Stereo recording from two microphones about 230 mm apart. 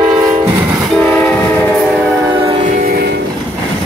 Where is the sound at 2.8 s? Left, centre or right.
Right.